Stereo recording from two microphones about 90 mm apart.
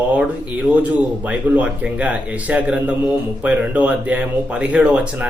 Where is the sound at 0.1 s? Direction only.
15° right (ahead or behind).